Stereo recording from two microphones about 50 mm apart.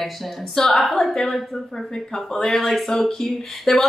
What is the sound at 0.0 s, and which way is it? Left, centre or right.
A woman's voice, centre.